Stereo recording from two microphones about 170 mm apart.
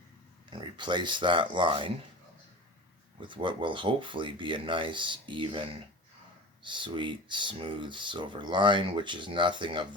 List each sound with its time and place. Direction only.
0.5 s speech: 25° right (ahead or behind)
3.2 s speech: 30° right (ahead or behind)